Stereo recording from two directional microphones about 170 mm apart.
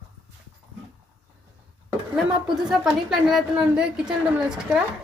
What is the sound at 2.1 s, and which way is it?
A woman's voice, centre (ahead or behind).